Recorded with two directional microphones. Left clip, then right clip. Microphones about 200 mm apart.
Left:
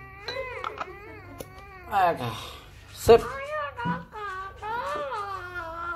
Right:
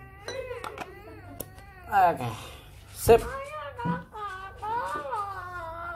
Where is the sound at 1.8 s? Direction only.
Centre (ahead or behind).